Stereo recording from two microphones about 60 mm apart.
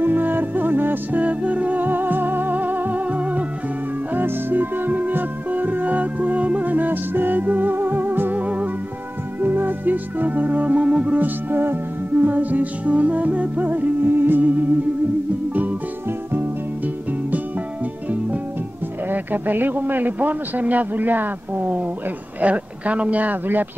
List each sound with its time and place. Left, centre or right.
0.0 s music: right
11.1 s music: right
16.3 s music: right
19.0 s a man's voice: right